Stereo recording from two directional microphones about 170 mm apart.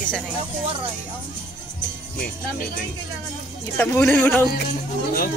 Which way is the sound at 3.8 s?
10° left (ahead or behind).